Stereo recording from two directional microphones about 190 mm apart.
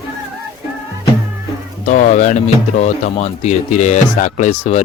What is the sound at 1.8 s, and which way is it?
Speech, 40° left (ahead or behind).